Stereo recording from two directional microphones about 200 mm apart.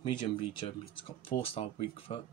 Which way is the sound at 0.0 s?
25° left (ahead or behind).